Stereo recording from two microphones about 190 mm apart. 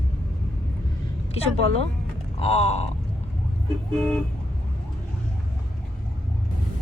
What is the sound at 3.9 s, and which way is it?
Vehicle, 5° left (ahead or behind).